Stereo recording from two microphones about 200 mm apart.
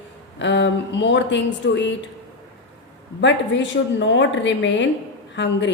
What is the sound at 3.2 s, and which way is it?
A woman's voice, 65° left (ahead or behind).